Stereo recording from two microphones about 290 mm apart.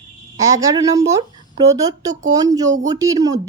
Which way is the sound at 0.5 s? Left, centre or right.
Centre.